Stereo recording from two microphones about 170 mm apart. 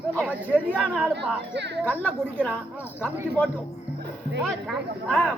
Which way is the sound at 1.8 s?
10° left (ahead or behind).